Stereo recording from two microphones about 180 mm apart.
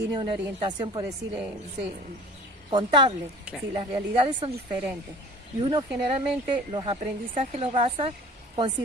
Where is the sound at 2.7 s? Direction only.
25° right (ahead or behind).